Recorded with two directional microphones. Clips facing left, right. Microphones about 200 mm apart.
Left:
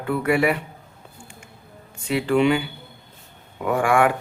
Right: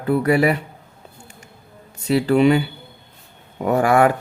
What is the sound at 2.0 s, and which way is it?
Speech, 40° right (ahead or behind).